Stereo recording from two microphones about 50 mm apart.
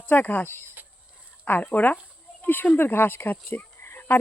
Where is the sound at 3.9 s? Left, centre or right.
Left.